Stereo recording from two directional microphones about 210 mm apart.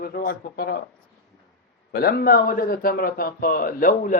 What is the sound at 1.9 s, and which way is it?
Speech, 50° left (ahead or behind).